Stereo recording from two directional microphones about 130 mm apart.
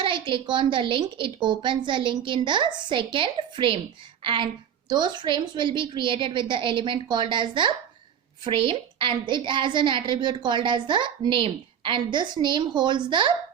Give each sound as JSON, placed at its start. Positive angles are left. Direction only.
{"t": 0.0, "sound": "a woman's voice", "side_deg": -40}